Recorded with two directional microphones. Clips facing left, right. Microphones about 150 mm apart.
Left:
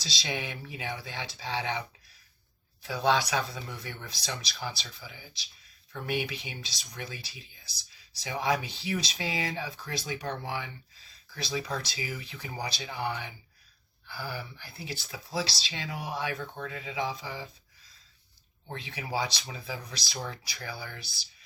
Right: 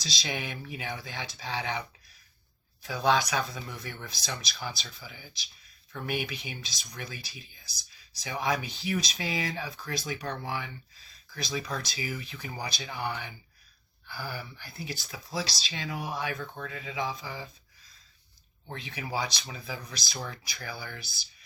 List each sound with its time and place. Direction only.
0.0 s speech: 30° left (ahead or behind)
2.8 s speech: 30° left (ahead or behind)
18.7 s speech: 25° left (ahead or behind)